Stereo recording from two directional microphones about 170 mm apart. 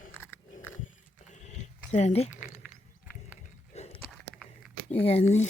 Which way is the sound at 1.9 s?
40° left (ahead or behind).